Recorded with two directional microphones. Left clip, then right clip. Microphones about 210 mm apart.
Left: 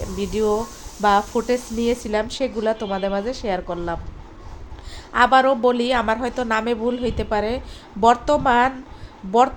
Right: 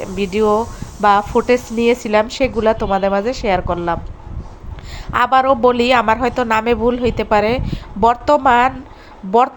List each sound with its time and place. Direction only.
0.2 s a woman's voice: 15° right (ahead or behind)
5.1 s a woman's voice: 15° right (ahead or behind)